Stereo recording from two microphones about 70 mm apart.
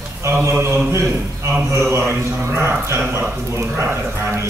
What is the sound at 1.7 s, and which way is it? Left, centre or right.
Speech, right.